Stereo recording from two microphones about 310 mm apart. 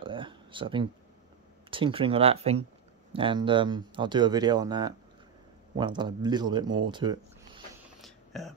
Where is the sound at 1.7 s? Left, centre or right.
Centre.